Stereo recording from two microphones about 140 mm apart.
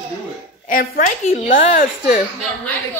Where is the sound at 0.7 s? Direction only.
75° left (ahead or behind).